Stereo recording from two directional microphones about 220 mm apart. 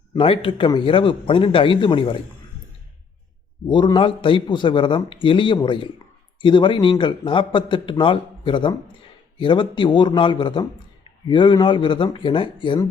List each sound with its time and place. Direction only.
0.2 s a man's voice: 25° left (ahead or behind)
3.7 s a man's voice: 20° left (ahead or behind)